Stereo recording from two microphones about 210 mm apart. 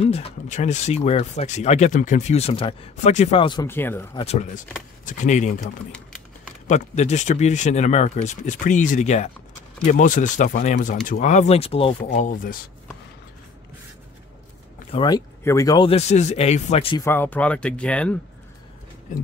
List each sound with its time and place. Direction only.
0.0 s speech: 30° left (ahead or behind)
3.6 s speech: 10° left (ahead or behind)
4.2 s speech: 30° left (ahead or behind)
6.7 s speech: 35° left (ahead or behind)
14.9 s speech: 20° left (ahead or behind)
17.0 s speech: 10° left (ahead or behind)